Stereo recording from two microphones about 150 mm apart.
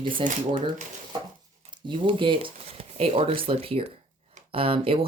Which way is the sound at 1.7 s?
30° right (ahead or behind).